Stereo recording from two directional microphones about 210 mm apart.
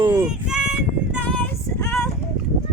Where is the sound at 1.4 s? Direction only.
10° left (ahead or behind).